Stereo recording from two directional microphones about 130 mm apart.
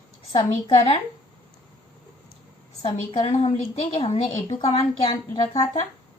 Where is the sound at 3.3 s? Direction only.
55° left (ahead or behind).